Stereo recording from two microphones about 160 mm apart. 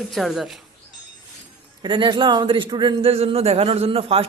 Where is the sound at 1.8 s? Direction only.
30° right (ahead or behind).